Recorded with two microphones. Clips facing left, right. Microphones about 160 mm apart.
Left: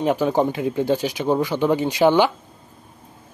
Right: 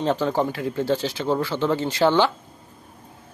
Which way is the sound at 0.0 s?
10° left (ahead or behind).